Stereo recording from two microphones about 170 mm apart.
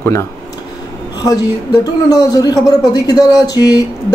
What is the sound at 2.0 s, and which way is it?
Speech, 20° left (ahead or behind).